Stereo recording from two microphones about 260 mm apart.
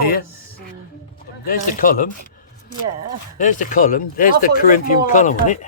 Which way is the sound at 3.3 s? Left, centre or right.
Left.